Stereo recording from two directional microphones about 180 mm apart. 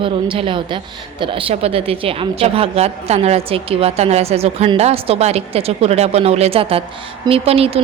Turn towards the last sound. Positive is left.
turn(degrees=-35)  # may be behind; listen again after turning